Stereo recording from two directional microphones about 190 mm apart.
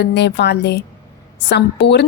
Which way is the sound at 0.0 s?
65° left (ahead or behind).